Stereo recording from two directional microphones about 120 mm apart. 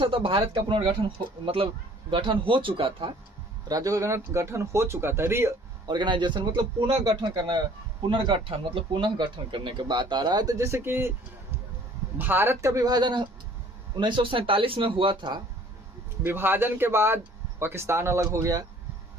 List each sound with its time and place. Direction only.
0.0 s speech: 50° right (ahead or behind)
3.7 s speech: 30° right (ahead or behind)
5.9 s speech: 40° right (ahead or behind)
8.0 s speech: 45° right (ahead or behind); by 11.1 s 20° right (ahead or behind)
12.1 s speech: 15° right (ahead or behind); by 15.4 s 40° right (ahead or behind)
16.2 s speech: 20° right (ahead or behind)